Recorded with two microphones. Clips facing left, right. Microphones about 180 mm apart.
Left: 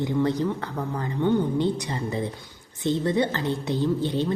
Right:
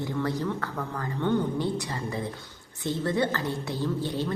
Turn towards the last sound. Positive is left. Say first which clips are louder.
# left 5 dB
turn(degrees=20)  # may be behind; listen again after turning